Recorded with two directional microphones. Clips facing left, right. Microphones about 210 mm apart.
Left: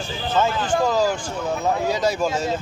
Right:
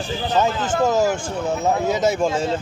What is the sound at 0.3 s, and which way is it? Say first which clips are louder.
Speech: right 1 dB; 20° right (ahead or behind).